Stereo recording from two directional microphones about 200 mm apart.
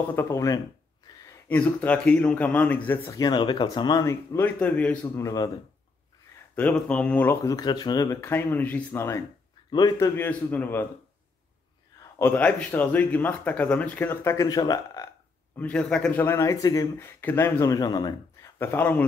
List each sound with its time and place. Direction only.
0.1 s speech: 15° left (ahead or behind)
3.0 s speech: 20° left (ahead or behind)
6.5 s speech: 5° left (ahead or behind)
12.0 s speech: 10° left (ahead or behind)
15.5 s speech: 5° left (ahead or behind)